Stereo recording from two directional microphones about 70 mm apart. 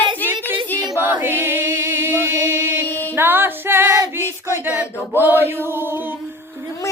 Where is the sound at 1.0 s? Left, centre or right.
Right.